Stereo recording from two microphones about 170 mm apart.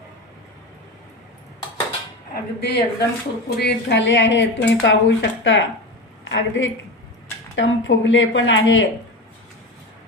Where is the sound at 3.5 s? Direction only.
75° left (ahead or behind).